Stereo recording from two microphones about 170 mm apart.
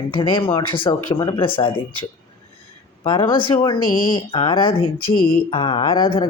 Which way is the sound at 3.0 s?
30° left (ahead or behind).